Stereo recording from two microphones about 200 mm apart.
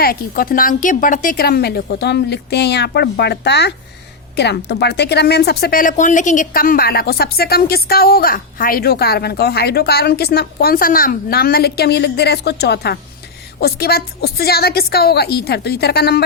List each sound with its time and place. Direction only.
0.0 s speech: 50° left (ahead or behind)